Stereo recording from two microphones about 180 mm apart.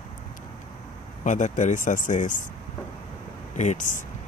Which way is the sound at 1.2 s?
45° left (ahead or behind).